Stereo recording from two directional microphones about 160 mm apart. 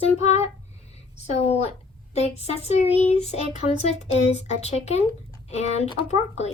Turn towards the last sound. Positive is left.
turn(degrees=45)  # may be behind; listen again after turning